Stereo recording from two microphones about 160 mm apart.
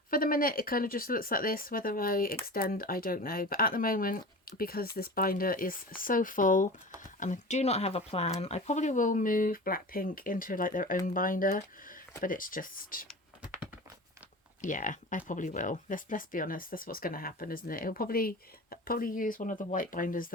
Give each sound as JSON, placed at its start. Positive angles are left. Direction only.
{"t": 0.1, "sound": "speech", "side_deg": 60}
{"t": 14.6, "sound": "speech", "side_deg": 55}